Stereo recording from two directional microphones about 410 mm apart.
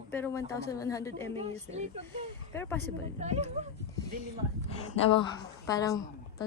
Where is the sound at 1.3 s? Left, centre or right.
Centre.